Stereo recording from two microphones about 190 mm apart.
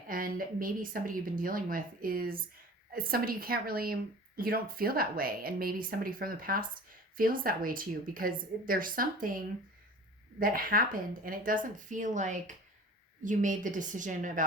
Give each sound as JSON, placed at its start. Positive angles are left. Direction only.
{"t": 0.1, "sound": "speech", "side_deg": -50}
{"t": 10.4, "sound": "speech", "side_deg": -50}